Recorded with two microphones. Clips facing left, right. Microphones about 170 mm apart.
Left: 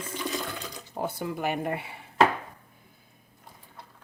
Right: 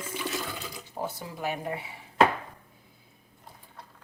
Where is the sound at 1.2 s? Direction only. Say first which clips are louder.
Left 4 dB; 60° left (ahead or behind).